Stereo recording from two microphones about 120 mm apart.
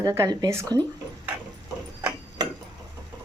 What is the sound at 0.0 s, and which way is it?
Speech, 25° right (ahead or behind).